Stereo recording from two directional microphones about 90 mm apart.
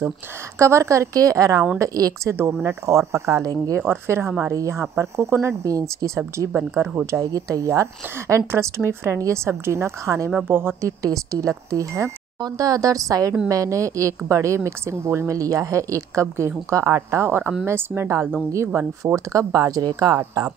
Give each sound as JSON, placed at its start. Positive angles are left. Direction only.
{"t": 0.6, "sound": "a woman's voice", "side_deg": -35}
{"t": 3.8, "sound": "a woman's voice", "side_deg": -25}
{"t": 5.7, "sound": "a woman's voice", "side_deg": -40}